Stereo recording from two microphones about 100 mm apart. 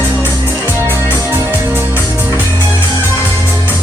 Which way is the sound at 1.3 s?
20° right (ahead or behind).